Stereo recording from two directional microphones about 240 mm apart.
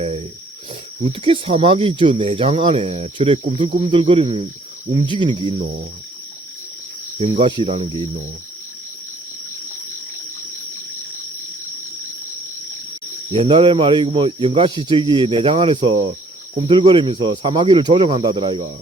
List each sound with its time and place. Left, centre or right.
1.0 s speech: right
7.2 s speech: right
13.3 s speech: right